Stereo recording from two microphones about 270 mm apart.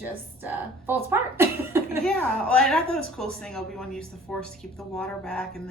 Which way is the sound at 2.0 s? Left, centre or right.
Centre.